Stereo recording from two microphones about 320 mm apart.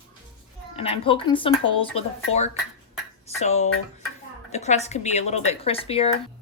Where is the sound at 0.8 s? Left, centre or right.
Centre.